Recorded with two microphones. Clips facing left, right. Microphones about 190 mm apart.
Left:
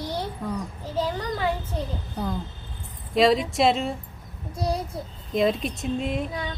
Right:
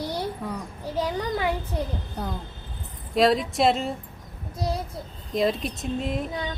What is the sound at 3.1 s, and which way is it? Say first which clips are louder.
Speech: left 1 dB; centre (ahead or behind).